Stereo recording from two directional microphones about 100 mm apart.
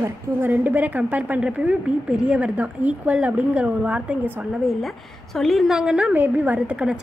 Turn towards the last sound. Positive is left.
turn(degrees=-10)  # may be behind; listen again after turning